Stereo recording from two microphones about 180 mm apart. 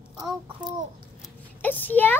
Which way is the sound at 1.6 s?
10° left (ahead or behind).